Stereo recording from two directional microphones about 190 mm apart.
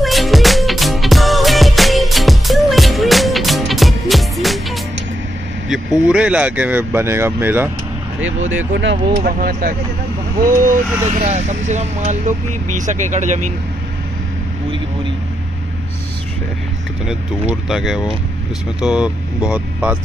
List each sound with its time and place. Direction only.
0.0 s music: centre (ahead or behind)
5.7 s speech: 5° right (ahead or behind)
9.2 s speech: 50° right (ahead or behind)
17.0 s speech: 5° right (ahead or behind)